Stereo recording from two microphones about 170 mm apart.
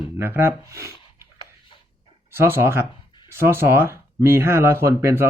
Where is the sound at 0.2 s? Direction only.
10° right (ahead or behind).